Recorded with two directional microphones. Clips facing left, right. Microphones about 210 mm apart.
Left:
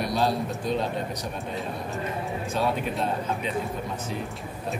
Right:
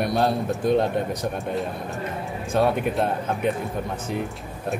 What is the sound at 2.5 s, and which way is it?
Speech, 60° right (ahead or behind).